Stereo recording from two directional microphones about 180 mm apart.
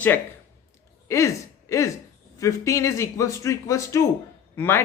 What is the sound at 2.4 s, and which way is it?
Speech, 15° left (ahead or behind).